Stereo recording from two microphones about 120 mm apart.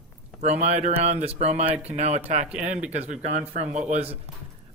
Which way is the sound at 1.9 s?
65° right (ahead or behind).